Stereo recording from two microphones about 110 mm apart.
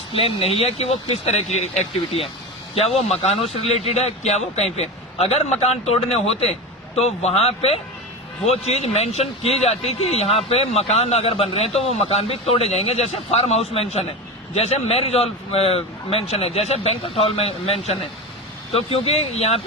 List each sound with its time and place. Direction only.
0.1 s speech: 55° left (ahead or behind); by 1.7 s 85° left
2.7 s speech: 70° left (ahead or behind)